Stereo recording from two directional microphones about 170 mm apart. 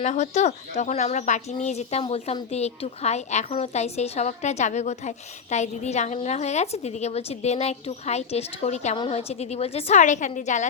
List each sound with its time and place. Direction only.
0.0 s speech: 45° left (ahead or behind)